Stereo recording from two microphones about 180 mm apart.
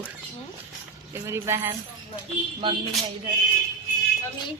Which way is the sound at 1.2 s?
15° right (ahead or behind).